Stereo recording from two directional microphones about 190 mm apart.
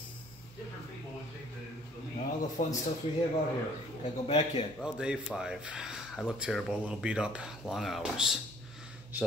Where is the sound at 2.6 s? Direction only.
50° left (ahead or behind).